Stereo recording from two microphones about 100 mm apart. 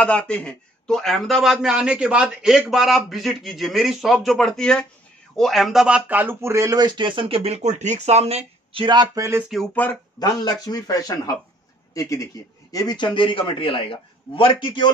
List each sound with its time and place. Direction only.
0.0 s a man's voice: 10° left (ahead or behind); by 8.8 s 90° right
8.8 s speech: 45° right (ahead or behind)
9.5 s a man's voice: centre (ahead or behind)
10.1 s a man's voice: 40° left (ahead or behind)
12.7 s a man's voice: 45° left (ahead or behind)